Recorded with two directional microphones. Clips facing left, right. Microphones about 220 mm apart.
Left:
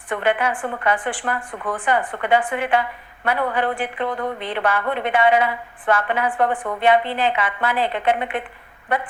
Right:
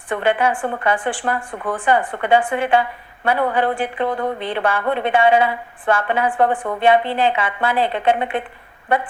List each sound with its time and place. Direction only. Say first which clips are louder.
0.1 s speech: right 3 dB; 30° right (ahead or behind)